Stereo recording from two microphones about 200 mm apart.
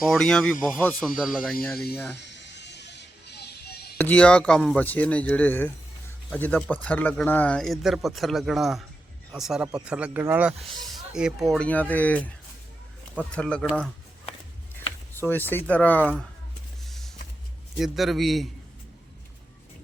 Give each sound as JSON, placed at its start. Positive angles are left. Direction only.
{"t": 0.0, "sound": "a man's voice", "side_deg": 0}
{"t": 2.1, "sound": "music", "side_deg": 60}
{"t": 3.9, "sound": "a man's voice", "side_deg": 5}
{"t": 11.5, "sound": "a man's voice", "side_deg": 5}
{"t": 15.1, "sound": "speech", "side_deg": 10}
{"t": 16.8, "sound": "vehicle", "side_deg": 0}
{"t": 17.7, "sound": "a man's voice", "side_deg": 0}